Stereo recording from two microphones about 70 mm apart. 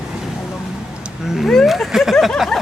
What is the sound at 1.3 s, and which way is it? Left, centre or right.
Speech, centre.